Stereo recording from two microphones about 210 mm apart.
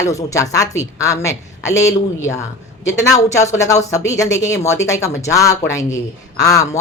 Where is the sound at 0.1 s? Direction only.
15° left (ahead or behind).